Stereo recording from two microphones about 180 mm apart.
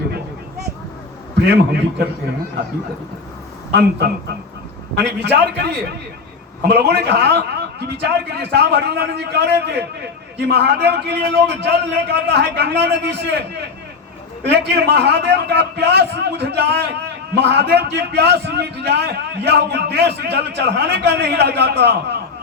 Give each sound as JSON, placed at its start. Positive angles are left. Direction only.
{"t": 3.7, "sound": "a man's voice", "side_deg": -65}
{"t": 14.4, "sound": "a man's voice", "side_deg": -65}